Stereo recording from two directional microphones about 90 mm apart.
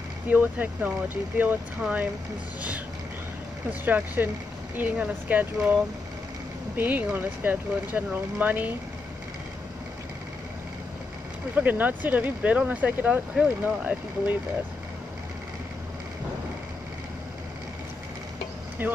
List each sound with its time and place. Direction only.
0.3 s speech: 20° right (ahead or behind)
3.8 s speech: 20° right (ahead or behind)
6.8 s speech: 20° right (ahead or behind)
11.5 s speech: 20° right (ahead or behind)
18.8 s speech: 20° right (ahead or behind)